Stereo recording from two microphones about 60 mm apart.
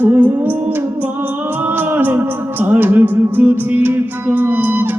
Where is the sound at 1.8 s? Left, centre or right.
Right.